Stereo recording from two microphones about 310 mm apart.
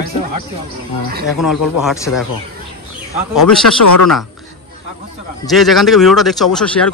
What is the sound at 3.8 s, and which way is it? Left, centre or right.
Speech, left.